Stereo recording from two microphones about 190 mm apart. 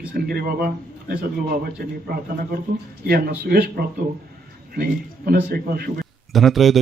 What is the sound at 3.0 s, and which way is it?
Speech, 50° right (ahead or behind).